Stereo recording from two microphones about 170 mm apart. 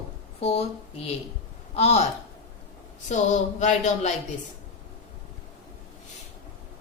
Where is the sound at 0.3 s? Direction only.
40° left (ahead or behind).